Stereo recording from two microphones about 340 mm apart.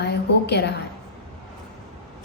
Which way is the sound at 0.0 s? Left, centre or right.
Left.